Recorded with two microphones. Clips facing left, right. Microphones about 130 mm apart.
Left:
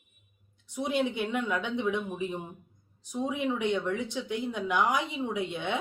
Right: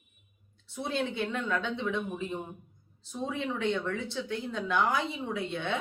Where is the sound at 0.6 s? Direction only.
15° left (ahead or behind).